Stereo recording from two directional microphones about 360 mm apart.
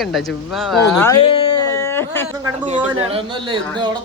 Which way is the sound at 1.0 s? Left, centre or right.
Centre.